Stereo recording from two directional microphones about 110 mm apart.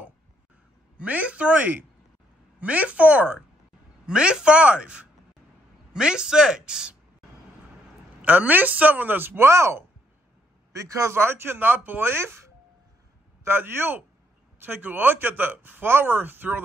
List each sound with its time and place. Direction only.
0.9 s speech: 15° right (ahead or behind)
8.2 s speech: 15° right (ahead or behind)